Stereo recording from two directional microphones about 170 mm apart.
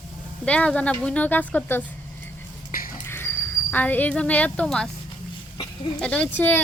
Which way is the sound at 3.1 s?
10° left (ahead or behind).